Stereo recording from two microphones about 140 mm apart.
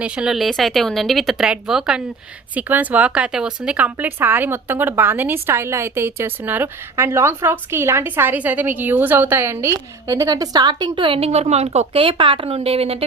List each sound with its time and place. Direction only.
0.0 s speech: 10° right (ahead or behind); by 13.1 s 45° right (ahead or behind)